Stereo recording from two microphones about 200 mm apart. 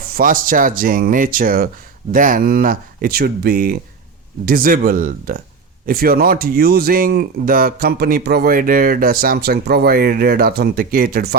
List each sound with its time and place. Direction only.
0.0 s speech: 45° right (ahead or behind)